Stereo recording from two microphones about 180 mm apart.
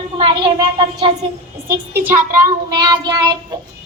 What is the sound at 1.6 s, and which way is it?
A woman's voice, 15° right (ahead or behind).